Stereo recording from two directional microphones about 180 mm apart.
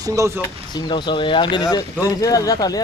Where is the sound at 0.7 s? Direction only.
25° left (ahead or behind).